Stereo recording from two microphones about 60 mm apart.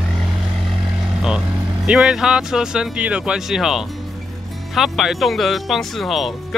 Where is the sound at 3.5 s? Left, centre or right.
Centre.